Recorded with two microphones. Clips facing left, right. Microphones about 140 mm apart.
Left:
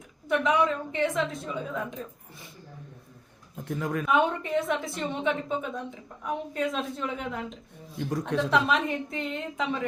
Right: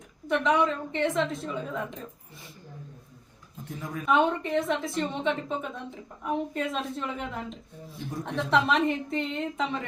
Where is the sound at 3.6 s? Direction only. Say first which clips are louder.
Left 6 dB; 70° left (ahead or behind).